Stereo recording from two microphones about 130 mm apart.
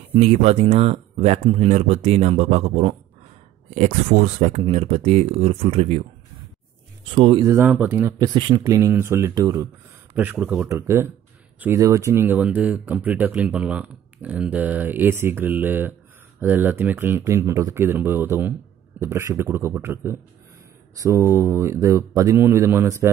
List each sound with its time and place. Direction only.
0.1 s speech: 55° right (ahead or behind)
3.7 s speech: 65° right (ahead or behind)
7.3 s speech: 20° right (ahead or behind)
8.4 s speech: 35° right (ahead or behind)
8.6 s speech: 25° right (ahead or behind)
10.1 s speech: 10° right (ahead or behind)